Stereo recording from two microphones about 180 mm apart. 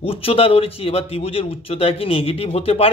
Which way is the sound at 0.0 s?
30° left (ahead or behind).